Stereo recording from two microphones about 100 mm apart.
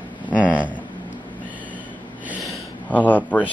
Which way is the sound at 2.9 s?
15° left (ahead or behind).